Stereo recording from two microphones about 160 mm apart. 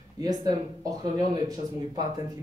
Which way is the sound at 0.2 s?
25° right (ahead or behind).